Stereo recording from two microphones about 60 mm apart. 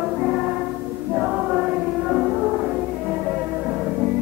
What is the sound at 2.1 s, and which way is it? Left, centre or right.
Music, centre.